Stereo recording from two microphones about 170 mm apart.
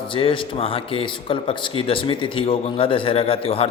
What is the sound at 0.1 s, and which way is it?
Speech, 30° left (ahead or behind).